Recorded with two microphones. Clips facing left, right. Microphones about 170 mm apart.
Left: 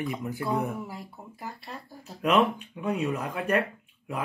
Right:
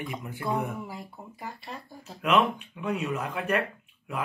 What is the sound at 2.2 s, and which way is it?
Speech, 35° left (ahead or behind).